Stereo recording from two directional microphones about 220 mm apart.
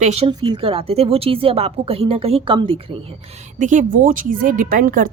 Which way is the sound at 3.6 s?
35° right (ahead or behind).